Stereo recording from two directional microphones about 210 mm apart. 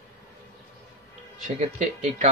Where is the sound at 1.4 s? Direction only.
35° right (ahead or behind).